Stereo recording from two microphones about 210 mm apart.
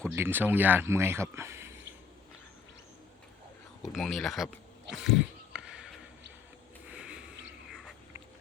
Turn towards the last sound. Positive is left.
turn(degrees=-5)  # may be behind; listen again after turning